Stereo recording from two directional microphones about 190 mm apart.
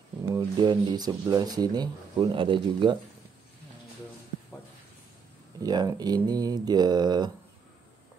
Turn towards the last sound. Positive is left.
turn(degrees=-20)  # may be behind; listen again after turning